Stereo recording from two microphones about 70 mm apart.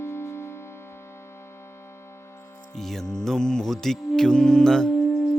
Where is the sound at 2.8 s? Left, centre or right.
Centre.